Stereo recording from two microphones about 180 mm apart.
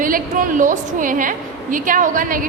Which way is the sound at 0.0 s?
50° right (ahead or behind).